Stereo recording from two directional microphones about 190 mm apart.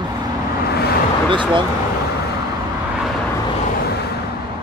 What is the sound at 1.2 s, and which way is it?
Speech, 25° right (ahead or behind).